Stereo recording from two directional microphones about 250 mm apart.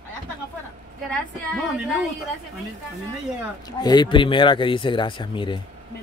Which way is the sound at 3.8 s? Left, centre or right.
Centre.